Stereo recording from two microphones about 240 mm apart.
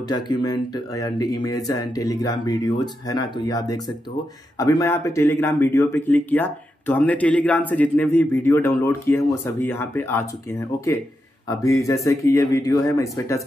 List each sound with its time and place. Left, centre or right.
0.1 s speech: centre